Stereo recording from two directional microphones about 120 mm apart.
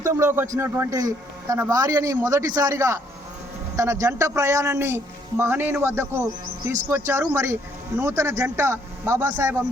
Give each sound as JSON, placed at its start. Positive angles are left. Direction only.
{"t": 0.0, "sound": "a man's voice", "side_deg": -25}